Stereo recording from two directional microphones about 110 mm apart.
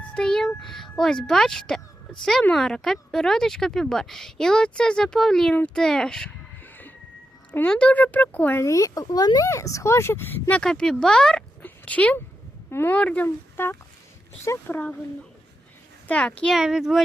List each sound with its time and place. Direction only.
0.1 s speech: 5° left (ahead or behind)
7.5 s speech: 10° left (ahead or behind)
8.6 s speech: 30° left (ahead or behind)
10.6 s speech: 5° left (ahead or behind)
11.6 s a sound: 15° left (ahead or behind)
12.7 s speech: 20° left (ahead or behind)
16.0 s speech: 10° left (ahead or behind)
16.6 s speech: 5° right (ahead or behind)